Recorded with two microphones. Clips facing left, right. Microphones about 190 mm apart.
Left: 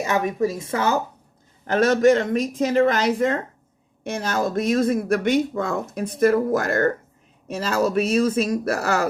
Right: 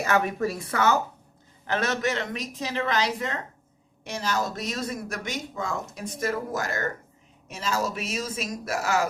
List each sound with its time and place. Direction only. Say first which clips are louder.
0.0 s speech: left 3 dB; 15° left (ahead or behind)
1.6 s a woman's voice: left 10 dB; 45° left (ahead or behind); by 9.0 s 65° left (ahead or behind)